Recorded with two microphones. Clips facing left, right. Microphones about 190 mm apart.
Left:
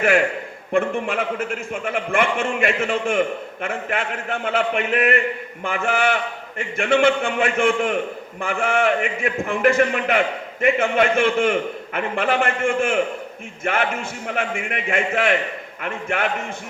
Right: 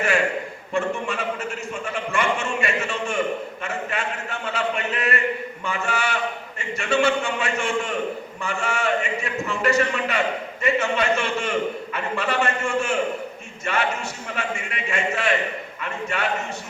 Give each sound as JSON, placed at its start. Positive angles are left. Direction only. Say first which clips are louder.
{"t": 0.7, "sound": "a man's voice", "louder": "left 4 dB", "side_deg": 55}